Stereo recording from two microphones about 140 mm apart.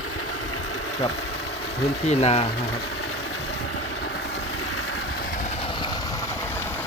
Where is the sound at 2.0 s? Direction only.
50° left (ahead or behind).